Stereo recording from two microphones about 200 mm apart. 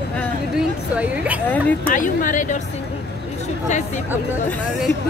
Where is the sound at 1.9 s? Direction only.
40° left (ahead or behind).